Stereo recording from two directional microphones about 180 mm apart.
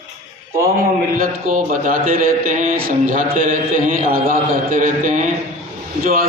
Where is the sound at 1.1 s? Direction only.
50° right (ahead or behind).